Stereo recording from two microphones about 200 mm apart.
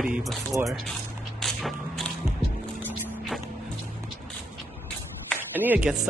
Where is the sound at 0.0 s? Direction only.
Centre (ahead or behind).